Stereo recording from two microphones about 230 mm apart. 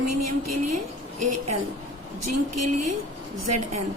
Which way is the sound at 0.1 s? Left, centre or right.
Right.